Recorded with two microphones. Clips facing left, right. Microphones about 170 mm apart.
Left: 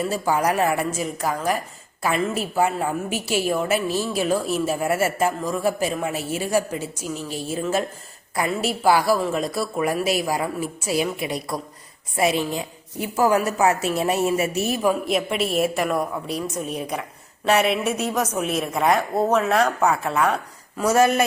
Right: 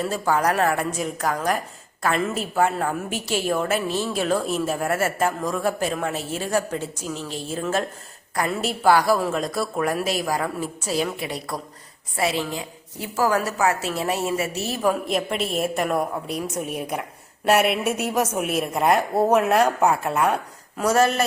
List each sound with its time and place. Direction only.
0.0 s a woman's voice: 5° left (ahead or behind)
14.8 s a woman's voice: 5° left (ahead or behind)
20.9 s a woman's voice: 10° left (ahead or behind)